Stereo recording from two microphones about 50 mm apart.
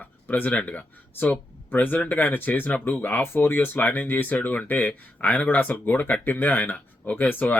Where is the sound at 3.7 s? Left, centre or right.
Left.